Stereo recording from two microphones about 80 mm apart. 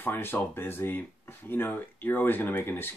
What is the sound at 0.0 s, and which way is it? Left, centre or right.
Speech, left.